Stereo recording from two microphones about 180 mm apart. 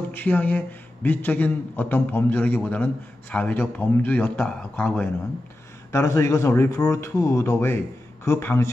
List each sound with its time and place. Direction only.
0.1 s a man's voice: 10° left (ahead or behind)